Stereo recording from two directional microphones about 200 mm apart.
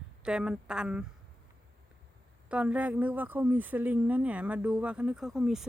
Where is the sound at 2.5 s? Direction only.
5° right (ahead or behind).